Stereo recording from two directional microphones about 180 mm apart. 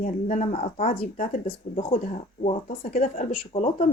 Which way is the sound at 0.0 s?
50° left (ahead or behind).